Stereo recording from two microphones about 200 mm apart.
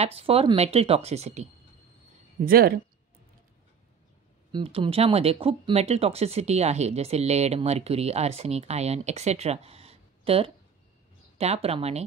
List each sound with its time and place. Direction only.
0.0 s speech: 30° right (ahead or behind)
2.4 s speech: 45° right (ahead or behind)
4.5 s speech: 25° right (ahead or behind)